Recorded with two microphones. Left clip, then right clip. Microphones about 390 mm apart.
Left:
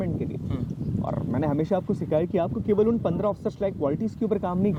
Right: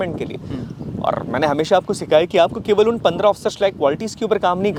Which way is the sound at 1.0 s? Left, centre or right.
Centre.